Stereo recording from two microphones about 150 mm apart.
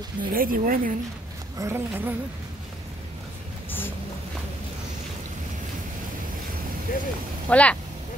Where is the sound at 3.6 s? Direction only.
15° left (ahead or behind).